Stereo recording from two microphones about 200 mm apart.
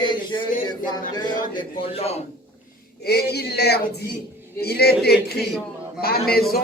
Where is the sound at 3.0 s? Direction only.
50° left (ahead or behind).